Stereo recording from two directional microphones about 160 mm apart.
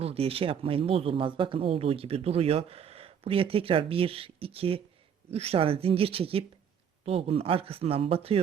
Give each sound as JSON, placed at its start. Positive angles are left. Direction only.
{"t": 0.0, "sound": "speech", "side_deg": -40}